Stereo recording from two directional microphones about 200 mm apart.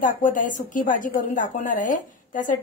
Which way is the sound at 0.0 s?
40° left (ahead or behind).